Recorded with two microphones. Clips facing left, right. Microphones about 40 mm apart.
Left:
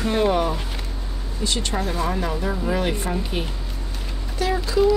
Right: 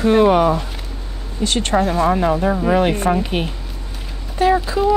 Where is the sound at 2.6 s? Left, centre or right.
Right.